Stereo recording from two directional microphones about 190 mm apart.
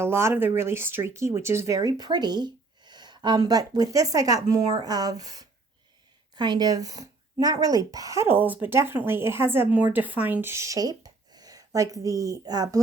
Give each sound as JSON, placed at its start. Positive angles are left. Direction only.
{"t": 0.0, "sound": "speech", "side_deg": -15}